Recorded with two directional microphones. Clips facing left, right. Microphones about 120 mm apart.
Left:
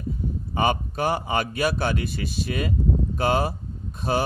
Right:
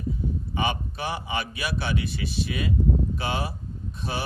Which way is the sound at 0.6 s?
45° left (ahead or behind).